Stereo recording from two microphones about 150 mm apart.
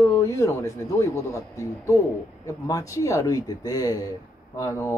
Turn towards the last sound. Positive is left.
turn(degrees=20)  # may be behind; listen again after turning